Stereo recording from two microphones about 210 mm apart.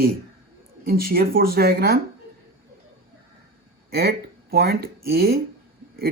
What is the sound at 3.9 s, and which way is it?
Speech, 45° right (ahead or behind).